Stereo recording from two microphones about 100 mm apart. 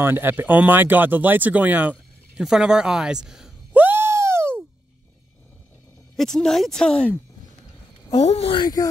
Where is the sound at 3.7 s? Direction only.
20° right (ahead or behind).